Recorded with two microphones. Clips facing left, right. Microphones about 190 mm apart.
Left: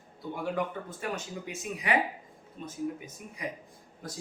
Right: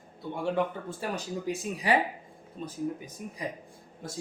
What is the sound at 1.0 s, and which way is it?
Speech, 35° right (ahead or behind).